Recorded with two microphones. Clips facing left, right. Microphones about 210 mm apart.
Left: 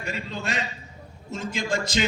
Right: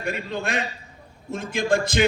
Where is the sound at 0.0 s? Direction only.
55° right (ahead or behind).